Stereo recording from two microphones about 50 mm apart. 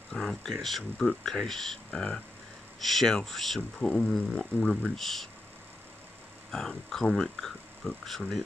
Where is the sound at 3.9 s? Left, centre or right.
Centre.